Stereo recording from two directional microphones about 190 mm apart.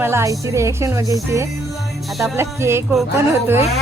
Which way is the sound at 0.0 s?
15° right (ahead or behind).